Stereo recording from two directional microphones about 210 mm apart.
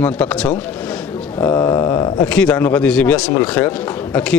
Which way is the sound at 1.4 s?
20° left (ahead or behind).